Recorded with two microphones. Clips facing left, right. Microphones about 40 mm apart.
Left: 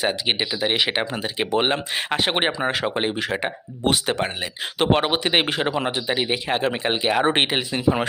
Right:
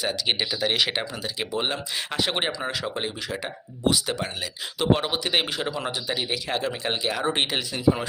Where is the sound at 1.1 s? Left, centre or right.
Left.